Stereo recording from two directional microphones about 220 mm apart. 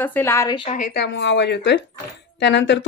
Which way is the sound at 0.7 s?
35° left (ahead or behind).